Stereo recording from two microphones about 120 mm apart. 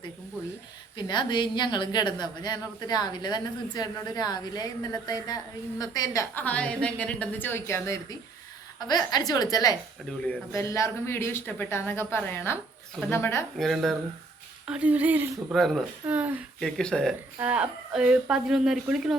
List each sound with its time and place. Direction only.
0.9 s a woman's voice: 40° left (ahead or behind)
6.3 s a woman's voice: 10° left (ahead or behind)
8.9 s a woman's voice: 35° left (ahead or behind)
10.1 s a woman's voice: 10° left (ahead or behind)
10.5 s speech: 25° left (ahead or behind)
13.6 s speech: centre (ahead or behind)
14.7 s speech: 10° right (ahead or behind)
15.5 s speech: centre (ahead or behind)
16.0 s speech: 10° right (ahead or behind)
16.6 s speech: 5° left (ahead or behind)
17.4 s speech: 10° right (ahead or behind)